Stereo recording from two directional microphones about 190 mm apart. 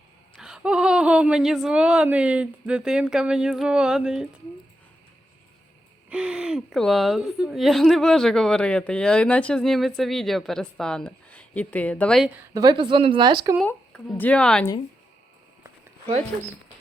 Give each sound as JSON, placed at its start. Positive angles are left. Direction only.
{"t": 0.3, "sound": "speech", "side_deg": -5}
{"t": 6.1, "sound": "a woman's voice", "side_deg": -5}
{"t": 12.5, "sound": "speech", "side_deg": -25}
{"t": 13.7, "sound": "a woman's voice", "side_deg": 5}